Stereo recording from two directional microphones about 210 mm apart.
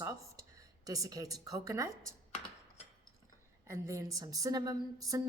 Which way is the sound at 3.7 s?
15° right (ahead or behind).